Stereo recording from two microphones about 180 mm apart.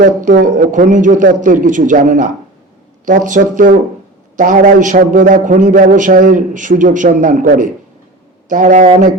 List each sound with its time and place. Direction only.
0.0 s a man's voice: 45° right (ahead or behind)